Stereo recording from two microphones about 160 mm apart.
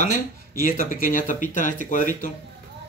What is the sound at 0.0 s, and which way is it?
Speech, 55° left (ahead or behind).